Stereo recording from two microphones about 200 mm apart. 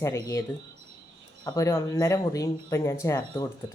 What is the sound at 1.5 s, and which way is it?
Speech, 15° left (ahead or behind).